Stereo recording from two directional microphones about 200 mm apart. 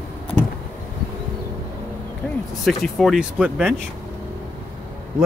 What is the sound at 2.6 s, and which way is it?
Speech, centre (ahead or behind).